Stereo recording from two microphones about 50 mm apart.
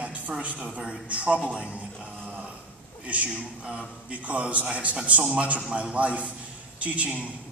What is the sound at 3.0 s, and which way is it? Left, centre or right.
A man's voice, right.